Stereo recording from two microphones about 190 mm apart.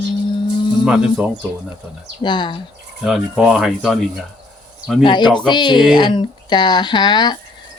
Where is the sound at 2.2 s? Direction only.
25° left (ahead or behind).